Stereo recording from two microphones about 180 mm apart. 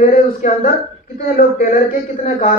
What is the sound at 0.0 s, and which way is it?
Speech, 50° left (ahead or behind).